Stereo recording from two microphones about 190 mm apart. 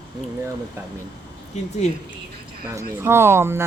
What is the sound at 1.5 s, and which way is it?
Speech, 40° left (ahead or behind).